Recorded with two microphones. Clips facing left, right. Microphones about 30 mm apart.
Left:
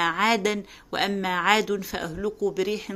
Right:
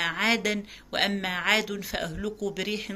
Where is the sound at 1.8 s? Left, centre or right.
Right.